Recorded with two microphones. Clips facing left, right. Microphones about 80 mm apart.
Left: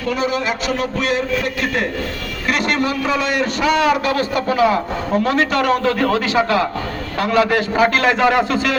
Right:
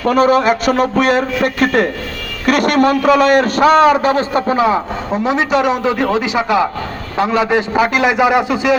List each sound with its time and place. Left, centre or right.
0.0 s a man's voice: right; by 8.8 s centre